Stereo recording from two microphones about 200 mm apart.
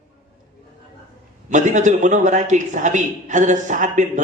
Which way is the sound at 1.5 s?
35° right (ahead or behind).